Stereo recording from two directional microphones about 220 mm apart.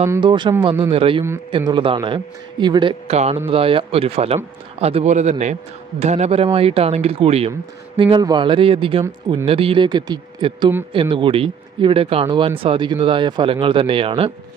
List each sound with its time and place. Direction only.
0.0 s a man's voice: 15° right (ahead or behind)